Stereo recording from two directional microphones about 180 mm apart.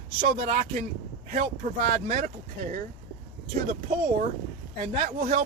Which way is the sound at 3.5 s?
40° right (ahead or behind).